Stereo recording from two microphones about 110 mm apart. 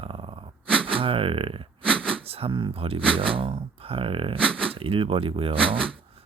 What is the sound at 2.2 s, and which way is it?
Speech, 65° right (ahead or behind).